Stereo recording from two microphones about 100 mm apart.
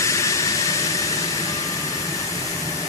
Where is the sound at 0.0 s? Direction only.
30° left (ahead or behind).